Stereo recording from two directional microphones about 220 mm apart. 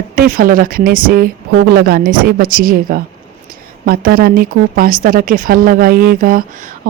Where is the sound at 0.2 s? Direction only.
40° right (ahead or behind).